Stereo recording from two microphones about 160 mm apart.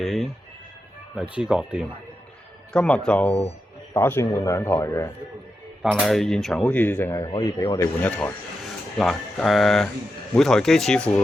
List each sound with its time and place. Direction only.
0.0 s music: centre (ahead or behind)
1.1 s speech: 5° right (ahead or behind)
2.7 s speech: 5° left (ahead or behind)
5.8 s speech: centre (ahead or behind); by 7.9 s 25° left (ahead or behind)
9.0 s speech: centre (ahead or behind)